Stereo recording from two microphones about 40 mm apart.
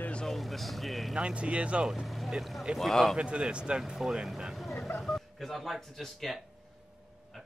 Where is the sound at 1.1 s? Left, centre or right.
Right.